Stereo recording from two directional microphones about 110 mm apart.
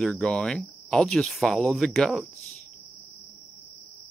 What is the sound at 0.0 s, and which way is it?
Speech, 5° left (ahead or behind).